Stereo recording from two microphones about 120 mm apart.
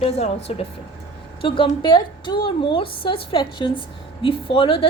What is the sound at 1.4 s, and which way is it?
A woman's voice, 45° left (ahead or behind).